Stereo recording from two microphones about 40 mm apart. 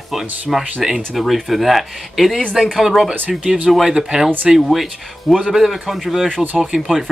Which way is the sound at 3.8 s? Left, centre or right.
Centre.